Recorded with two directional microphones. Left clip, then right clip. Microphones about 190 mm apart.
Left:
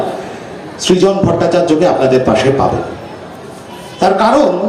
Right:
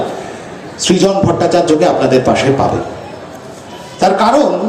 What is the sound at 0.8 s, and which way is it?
Music, 30° right (ahead or behind).